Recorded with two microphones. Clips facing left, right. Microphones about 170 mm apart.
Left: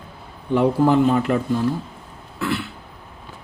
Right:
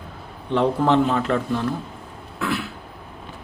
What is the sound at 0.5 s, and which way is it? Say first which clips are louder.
Speech: left 2 dB; 10° left (ahead or behind).